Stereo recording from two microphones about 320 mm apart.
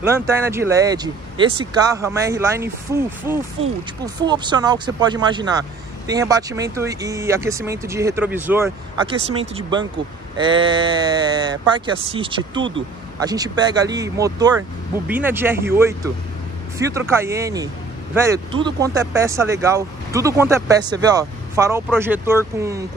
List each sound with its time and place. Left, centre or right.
0.0 s speech: centre
9.3 s speech: centre